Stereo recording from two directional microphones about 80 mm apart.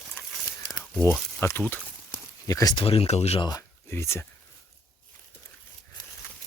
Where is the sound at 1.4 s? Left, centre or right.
Left.